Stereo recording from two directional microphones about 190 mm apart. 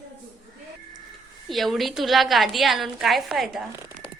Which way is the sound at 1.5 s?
Centre (ahead or behind).